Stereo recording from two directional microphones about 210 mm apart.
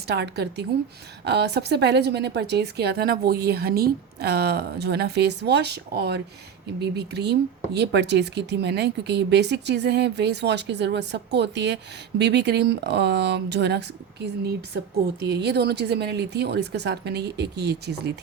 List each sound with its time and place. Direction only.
0.1 s a woman's voice: 50° right (ahead or behind)
15.2 s a woman's voice: 50° right (ahead or behind)